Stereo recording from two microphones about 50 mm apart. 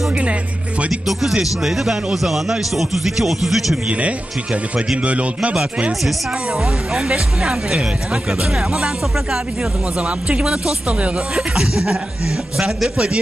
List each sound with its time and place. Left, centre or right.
0.1 s music: right
1.0 s speech: centre
3.8 s speech: right
6.5 s speech: centre
9.6 s speech: right
11.5 s speech: centre